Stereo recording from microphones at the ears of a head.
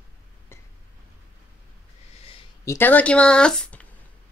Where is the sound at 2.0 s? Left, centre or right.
Left.